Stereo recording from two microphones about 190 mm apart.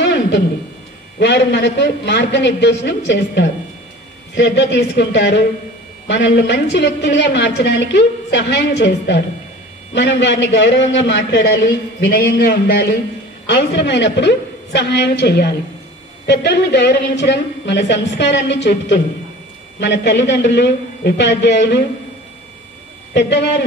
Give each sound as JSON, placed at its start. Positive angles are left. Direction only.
{"t": 0.0, "sound": "a sound", "side_deg": 65}
{"t": 1.2, "sound": "a woman's voice", "side_deg": 65}
{"t": 12.0, "sound": "a man's voice", "side_deg": 50}